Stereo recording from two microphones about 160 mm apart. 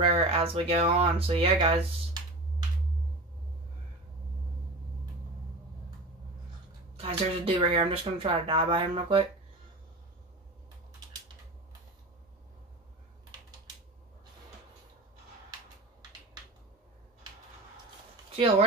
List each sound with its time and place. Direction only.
0.0 s speech: 35° right (ahead or behind)
7.0 s speech: 35° right (ahead or behind)